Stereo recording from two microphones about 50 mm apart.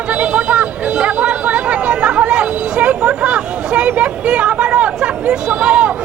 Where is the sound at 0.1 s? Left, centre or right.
Right.